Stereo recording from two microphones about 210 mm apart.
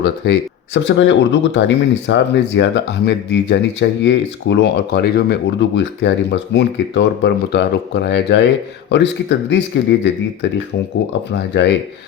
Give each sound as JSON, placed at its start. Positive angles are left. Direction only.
{"t": 0.0, "sound": "speech", "side_deg": 55}